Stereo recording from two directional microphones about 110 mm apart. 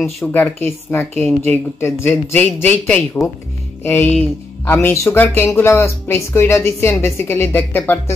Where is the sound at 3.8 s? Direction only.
20° left (ahead or behind).